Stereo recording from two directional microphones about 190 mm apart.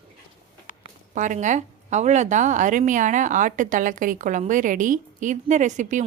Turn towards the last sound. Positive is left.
turn(degrees=-40)  # may be behind; listen again after turning